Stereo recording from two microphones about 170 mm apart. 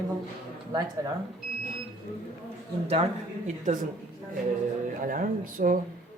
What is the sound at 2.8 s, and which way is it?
Speech, 40° right (ahead or behind).